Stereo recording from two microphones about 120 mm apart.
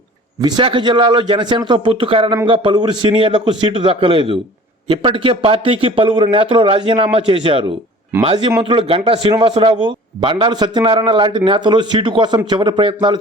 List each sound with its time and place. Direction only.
0.4 s a man's voice: 40° right (ahead or behind)